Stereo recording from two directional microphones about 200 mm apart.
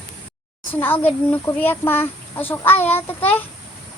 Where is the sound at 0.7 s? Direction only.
10° left (ahead or behind).